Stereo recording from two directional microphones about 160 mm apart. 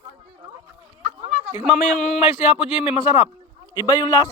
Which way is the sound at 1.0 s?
45° right (ahead or behind).